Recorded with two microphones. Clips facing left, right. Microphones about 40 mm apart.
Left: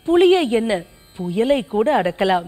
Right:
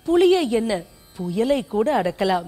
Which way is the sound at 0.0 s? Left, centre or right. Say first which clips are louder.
Left 3 dB; left.